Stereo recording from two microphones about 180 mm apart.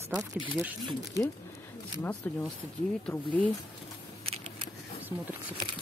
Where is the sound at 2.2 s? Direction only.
10° left (ahead or behind).